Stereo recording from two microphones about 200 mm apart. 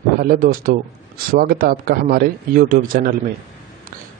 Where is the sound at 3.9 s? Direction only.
45° right (ahead or behind).